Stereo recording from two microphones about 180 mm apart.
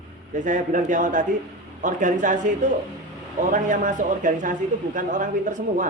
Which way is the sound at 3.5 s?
45° right (ahead or behind).